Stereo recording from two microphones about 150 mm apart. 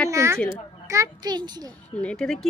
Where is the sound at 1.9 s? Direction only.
5° left (ahead or behind).